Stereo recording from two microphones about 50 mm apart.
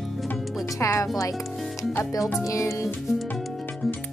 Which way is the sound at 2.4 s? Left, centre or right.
Left.